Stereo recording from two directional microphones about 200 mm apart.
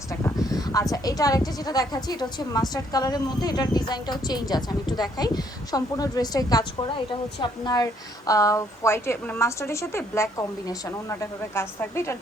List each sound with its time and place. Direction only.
0.3 s a woman's voice: 20° left (ahead or behind)